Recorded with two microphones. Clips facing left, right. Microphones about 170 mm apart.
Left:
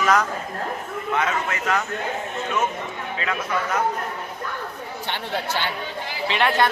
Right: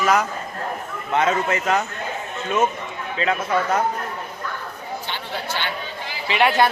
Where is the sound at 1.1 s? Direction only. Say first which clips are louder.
Right 5 dB; 30° right (ahead or behind).